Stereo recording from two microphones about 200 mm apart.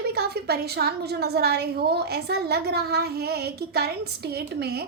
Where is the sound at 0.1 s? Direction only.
50° right (ahead or behind).